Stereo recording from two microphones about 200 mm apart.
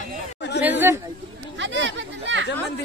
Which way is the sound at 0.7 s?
10° right (ahead or behind).